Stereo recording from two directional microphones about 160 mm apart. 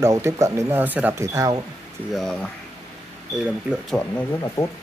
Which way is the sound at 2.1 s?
Centre (ahead or behind).